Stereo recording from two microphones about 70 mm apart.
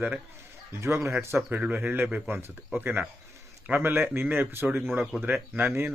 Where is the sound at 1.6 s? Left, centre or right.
Right.